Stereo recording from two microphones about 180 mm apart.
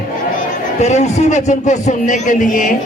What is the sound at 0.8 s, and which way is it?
A man's voice, 40° left (ahead or behind).